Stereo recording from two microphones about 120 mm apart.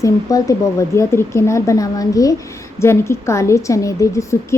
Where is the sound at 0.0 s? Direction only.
30° left (ahead or behind).